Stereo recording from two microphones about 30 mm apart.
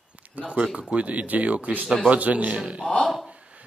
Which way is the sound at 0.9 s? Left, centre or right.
Right.